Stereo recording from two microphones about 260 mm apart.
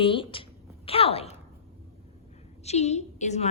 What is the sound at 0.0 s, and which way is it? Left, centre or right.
A woman's voice, centre.